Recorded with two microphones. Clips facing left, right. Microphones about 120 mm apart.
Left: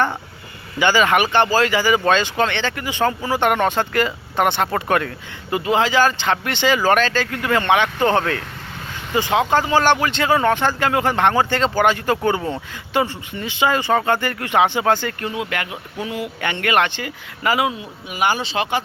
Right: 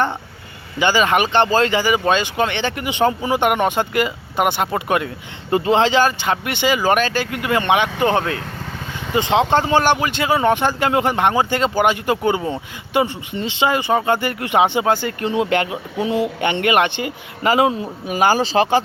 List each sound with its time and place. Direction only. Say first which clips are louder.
0.8 s speech: even; 20° right (ahead or behind)
5.5 s speech: right 3 dB; 30° right (ahead or behind)